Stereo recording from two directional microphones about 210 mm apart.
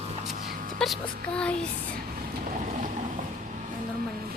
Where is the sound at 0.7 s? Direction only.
Centre (ahead or behind).